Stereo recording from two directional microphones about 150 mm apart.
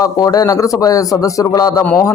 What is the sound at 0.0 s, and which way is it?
Speech, 25° left (ahead or behind).